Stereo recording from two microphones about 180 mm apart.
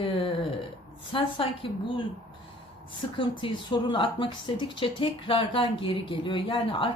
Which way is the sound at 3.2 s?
25° left (ahead or behind).